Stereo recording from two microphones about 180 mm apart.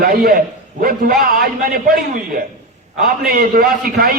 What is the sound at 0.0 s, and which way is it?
A man's voice, 55° right (ahead or behind).